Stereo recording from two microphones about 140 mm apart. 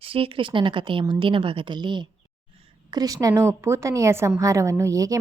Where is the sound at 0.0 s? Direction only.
40° right (ahead or behind).